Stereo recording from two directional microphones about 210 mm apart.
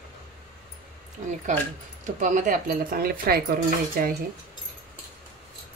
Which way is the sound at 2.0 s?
35° right (ahead or behind).